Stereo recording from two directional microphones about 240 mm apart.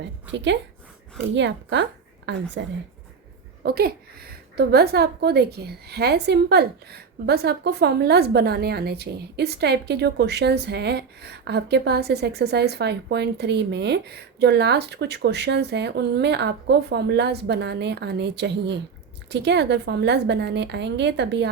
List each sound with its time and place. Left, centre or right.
0.0 s a woman's voice: right